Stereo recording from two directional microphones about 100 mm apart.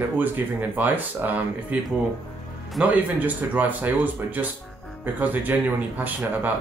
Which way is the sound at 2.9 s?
15° right (ahead or behind).